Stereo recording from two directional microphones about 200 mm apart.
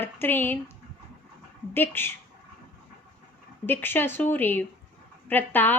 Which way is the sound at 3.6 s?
10° left (ahead or behind).